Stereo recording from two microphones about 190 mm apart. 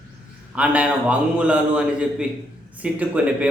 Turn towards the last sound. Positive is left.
turn(degrees=-5)  # may be behind; listen again after turning